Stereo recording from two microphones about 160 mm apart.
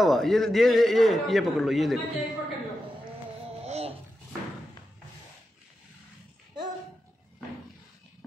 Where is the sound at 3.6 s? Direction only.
40° right (ahead or behind).